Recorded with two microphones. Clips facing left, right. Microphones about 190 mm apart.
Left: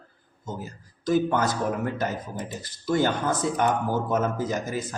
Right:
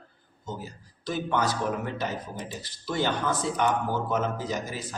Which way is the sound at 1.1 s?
45° left (ahead or behind).